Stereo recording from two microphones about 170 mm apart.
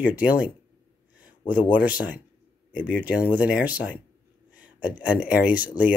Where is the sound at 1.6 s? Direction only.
10° right (ahead or behind).